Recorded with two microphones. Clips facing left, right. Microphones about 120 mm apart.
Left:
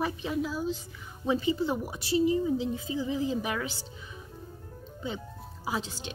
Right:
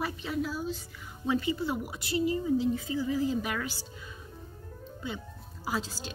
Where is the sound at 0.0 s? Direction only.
20° left (ahead or behind).